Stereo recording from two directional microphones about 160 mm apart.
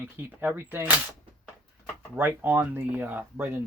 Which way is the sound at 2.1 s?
10° right (ahead or behind).